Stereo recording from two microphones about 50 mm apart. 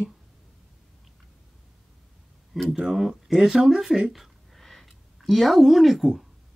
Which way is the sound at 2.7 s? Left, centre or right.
Centre.